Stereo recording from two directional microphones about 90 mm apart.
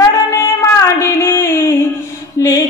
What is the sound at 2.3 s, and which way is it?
Mantra, 35° left (ahead or behind).